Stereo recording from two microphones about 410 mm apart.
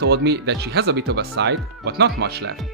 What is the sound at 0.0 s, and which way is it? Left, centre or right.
Speech, right.